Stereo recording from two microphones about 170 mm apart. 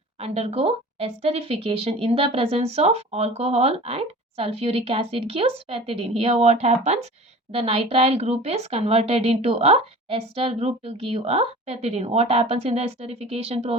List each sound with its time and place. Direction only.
0.2 s speech: 35° right (ahead or behind)